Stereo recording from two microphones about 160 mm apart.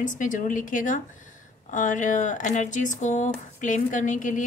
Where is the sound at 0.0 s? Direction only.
55° left (ahead or behind).